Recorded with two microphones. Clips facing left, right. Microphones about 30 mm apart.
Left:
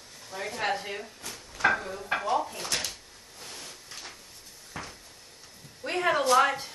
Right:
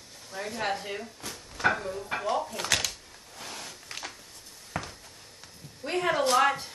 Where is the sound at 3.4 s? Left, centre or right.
Right.